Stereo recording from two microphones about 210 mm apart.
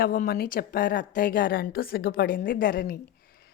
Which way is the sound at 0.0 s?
45° left (ahead or behind).